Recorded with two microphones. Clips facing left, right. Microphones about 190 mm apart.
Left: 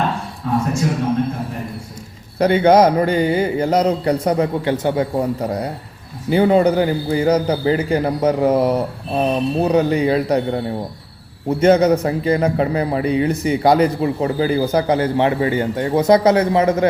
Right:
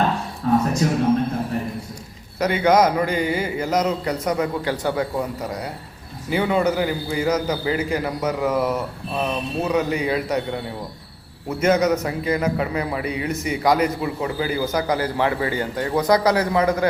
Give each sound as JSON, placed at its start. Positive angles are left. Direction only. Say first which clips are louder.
{"t": 2.4, "sound": "a man's voice", "louder": "left 5 dB", "side_deg": 30}
{"t": 5.1, "sound": "a man's voice", "louder": "left 6 dB", "side_deg": 30}